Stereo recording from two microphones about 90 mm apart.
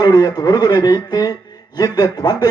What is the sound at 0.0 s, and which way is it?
A man's voice, 50° left (ahead or behind).